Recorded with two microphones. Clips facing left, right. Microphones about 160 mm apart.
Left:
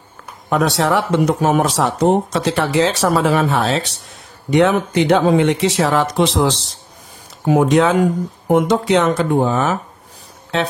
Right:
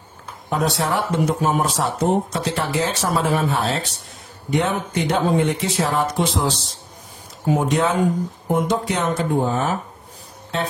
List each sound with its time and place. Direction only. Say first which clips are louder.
0.5 s speech: left 5 dB; 90° left